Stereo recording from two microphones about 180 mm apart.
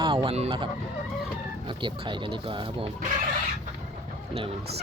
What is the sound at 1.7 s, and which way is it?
Speech, 25° right (ahead or behind).